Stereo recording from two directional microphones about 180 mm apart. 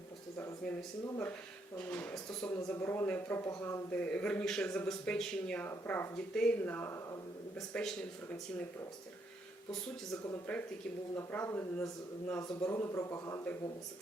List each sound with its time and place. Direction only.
0.3 s a sound: 10° left (ahead or behind)
1.0 s speech: 15° left (ahead or behind)
10.2 s speech: 10° left (ahead or behind)